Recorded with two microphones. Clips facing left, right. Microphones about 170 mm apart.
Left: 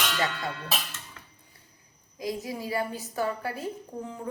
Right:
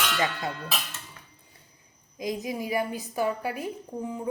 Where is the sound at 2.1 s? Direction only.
20° right (ahead or behind).